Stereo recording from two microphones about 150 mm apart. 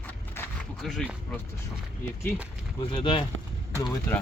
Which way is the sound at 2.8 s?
30° left (ahead or behind).